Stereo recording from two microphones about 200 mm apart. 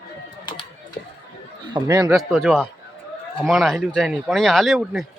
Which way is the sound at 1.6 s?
20° right (ahead or behind).